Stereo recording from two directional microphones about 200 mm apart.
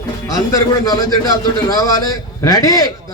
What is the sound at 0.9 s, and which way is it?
A man's voice, 20° left (ahead or behind).